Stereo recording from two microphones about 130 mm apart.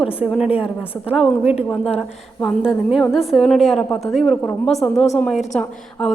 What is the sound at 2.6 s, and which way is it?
A woman's voice, centre (ahead or behind).